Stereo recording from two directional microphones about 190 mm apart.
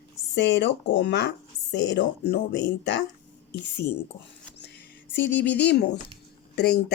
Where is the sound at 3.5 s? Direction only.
65° left (ahead or behind).